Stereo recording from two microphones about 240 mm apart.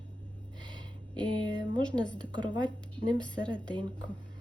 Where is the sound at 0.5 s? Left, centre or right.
Centre.